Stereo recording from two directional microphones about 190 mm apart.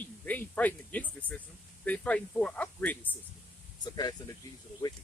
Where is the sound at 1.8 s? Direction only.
5° left (ahead or behind).